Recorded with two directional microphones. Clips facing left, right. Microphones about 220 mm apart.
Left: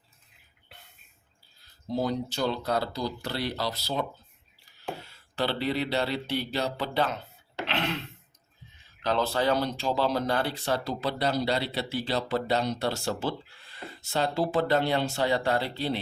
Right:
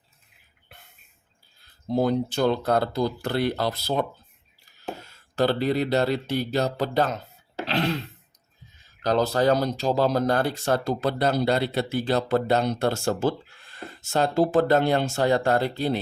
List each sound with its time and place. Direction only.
1.9 s speech: 55° right (ahead or behind)
7.6 s a sound: 35° right (ahead or behind)
9.0 s speech: 40° right (ahead or behind)